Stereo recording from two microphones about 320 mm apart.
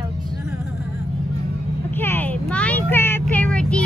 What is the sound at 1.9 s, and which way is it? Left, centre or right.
Vehicle, centre.